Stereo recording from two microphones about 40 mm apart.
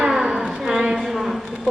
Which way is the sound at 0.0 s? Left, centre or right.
Centre.